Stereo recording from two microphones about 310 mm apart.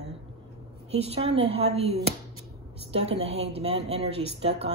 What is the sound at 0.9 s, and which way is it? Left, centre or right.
A woman's voice, centre.